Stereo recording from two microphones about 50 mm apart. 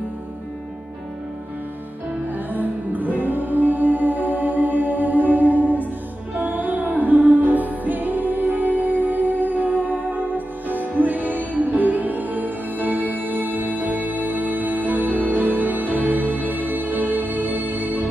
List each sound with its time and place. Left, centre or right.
2.3 s music: right